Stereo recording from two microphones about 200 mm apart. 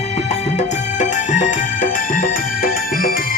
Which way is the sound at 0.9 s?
35° left (ahead or behind).